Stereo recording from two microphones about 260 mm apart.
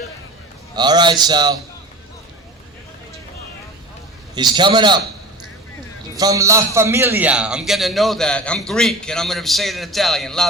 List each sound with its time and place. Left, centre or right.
0.8 s a man's voice: centre
4.4 s a man's voice: centre
6.1 s a man's voice: centre